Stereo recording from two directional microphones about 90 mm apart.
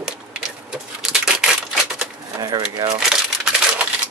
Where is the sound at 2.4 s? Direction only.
45° right (ahead or behind).